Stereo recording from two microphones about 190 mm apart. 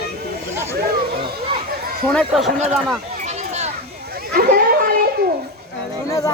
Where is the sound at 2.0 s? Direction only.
5° left (ahead or behind).